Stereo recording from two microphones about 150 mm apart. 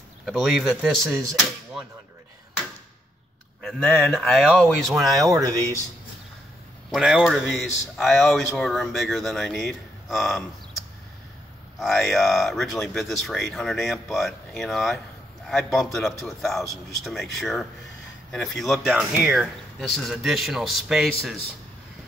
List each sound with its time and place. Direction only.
0.2 s speech: centre (ahead or behind)
3.6 s speech: 5° left (ahead or behind)
5.3 s speech: 25° right (ahead or behind)
6.9 s speech: centre (ahead or behind)
11.8 s speech: centre (ahead or behind)